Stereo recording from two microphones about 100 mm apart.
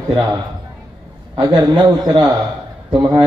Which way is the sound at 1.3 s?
45° right (ahead or behind).